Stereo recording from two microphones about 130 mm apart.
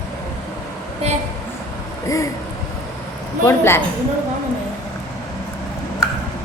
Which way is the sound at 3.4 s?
20° left (ahead or behind).